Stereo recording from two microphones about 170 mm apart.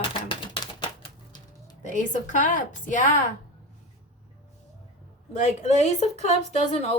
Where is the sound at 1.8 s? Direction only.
50° left (ahead or behind).